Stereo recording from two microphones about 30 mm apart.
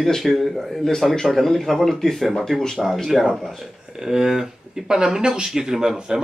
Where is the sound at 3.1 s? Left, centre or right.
Centre.